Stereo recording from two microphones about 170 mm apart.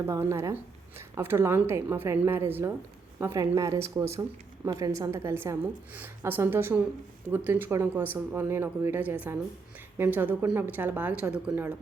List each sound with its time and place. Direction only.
0.0 s a woman's voice: 15° right (ahead or behind)